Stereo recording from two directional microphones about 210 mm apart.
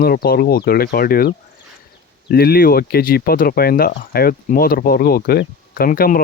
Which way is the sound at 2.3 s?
45° left (ahead or behind).